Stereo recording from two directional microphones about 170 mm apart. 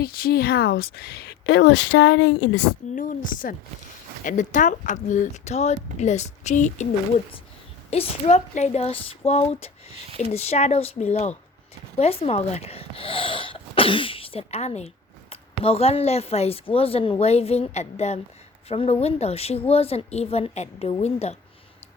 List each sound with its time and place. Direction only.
0.0 s speech: 60° left (ahead or behind); by 2.4 s 90° left
2.9 s speech: 50° left (ahead or behind)
7.9 s speech: 40° left (ahead or behind)